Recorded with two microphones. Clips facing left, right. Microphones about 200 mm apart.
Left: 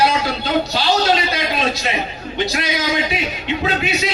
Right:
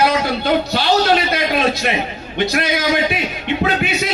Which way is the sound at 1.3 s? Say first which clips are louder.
Right 3 dB; 55° right (ahead or behind).